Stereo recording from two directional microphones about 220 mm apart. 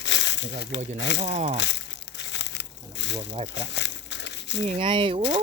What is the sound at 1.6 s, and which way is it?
Crumpling, 50° left (ahead or behind).